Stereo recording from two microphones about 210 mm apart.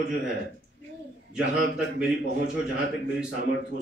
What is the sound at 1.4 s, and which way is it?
A man's voice, 60° left (ahead or behind).